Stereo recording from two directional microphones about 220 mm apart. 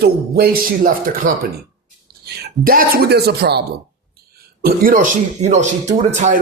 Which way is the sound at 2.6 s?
40° right (ahead or behind).